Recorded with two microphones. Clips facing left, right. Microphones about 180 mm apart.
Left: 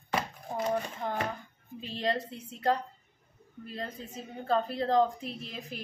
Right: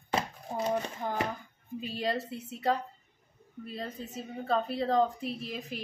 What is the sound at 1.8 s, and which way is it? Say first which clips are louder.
A woman's voice: left 1 dB; 5° right (ahead or behind).